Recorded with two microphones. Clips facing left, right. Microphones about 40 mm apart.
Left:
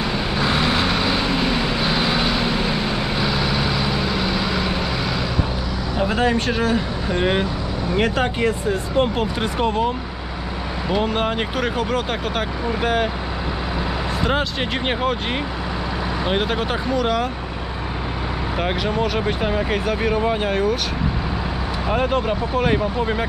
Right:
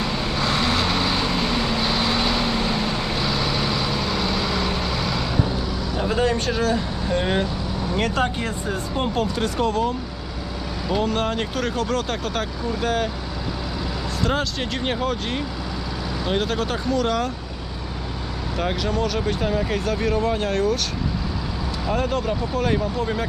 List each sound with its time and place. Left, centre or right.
0.0 s vehicle: centre
5.9 s speech: left
14.9 s speech: left
16.3 s speech: left
18.6 s speech: left
21.8 s speech: left